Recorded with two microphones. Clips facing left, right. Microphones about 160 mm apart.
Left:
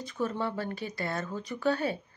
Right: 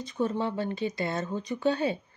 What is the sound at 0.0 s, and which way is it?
Speech, 20° right (ahead or behind).